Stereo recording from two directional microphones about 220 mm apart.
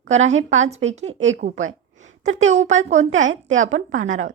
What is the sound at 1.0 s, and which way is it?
Speech, 60° right (ahead or behind).